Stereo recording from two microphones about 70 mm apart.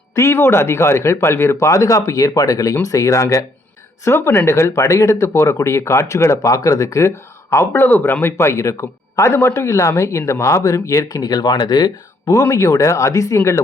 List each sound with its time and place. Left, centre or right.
0.2 s speech: left
6.4 s speech: left
7.5 s speech: left
7.9 s speech: left
8.2 s speech: left
12.5 s speech: left